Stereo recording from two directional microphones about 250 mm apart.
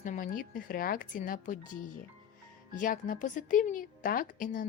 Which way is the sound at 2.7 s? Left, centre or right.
Left.